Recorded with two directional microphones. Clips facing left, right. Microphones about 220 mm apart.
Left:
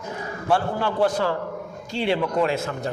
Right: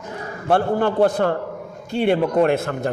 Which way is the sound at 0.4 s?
55° right (ahead or behind).